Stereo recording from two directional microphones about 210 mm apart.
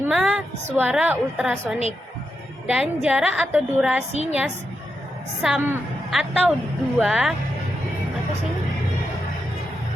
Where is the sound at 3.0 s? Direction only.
5° right (ahead or behind).